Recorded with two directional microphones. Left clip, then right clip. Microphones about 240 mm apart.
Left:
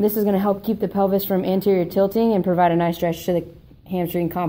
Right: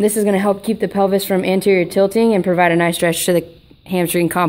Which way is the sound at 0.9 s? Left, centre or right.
Right.